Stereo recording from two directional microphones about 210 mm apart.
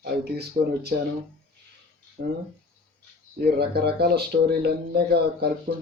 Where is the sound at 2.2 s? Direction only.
45° right (ahead or behind).